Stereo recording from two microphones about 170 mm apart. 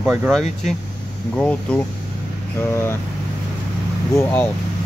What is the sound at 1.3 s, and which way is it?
Speech, 10° left (ahead or behind).